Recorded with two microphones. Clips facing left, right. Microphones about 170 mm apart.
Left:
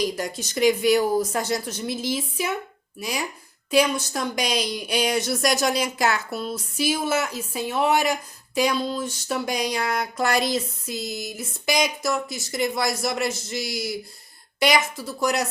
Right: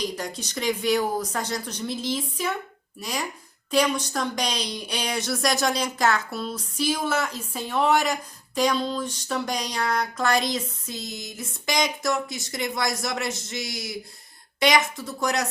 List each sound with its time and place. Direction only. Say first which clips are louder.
0.3 s a woman's voice: left 10 dB; 5° left (ahead or behind)